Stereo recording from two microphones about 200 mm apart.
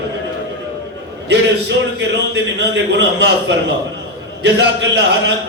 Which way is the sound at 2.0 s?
60° right (ahead or behind).